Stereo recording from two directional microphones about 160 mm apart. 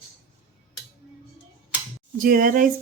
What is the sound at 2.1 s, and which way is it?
Speech, 60° right (ahead or behind).